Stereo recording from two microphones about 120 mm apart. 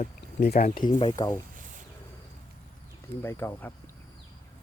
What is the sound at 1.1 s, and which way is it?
Speech, 25° left (ahead or behind).